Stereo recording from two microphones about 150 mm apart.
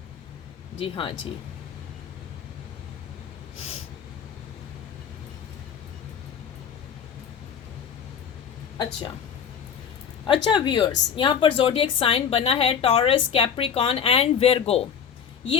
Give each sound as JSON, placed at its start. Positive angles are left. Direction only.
{"t": 0.8, "sound": "a woman's voice", "side_deg": 35}
{"t": 10.2, "sound": "a woman's voice", "side_deg": 35}